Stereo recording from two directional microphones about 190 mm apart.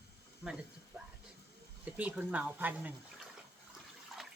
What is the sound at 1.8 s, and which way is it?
Speech, 5° right (ahead or behind).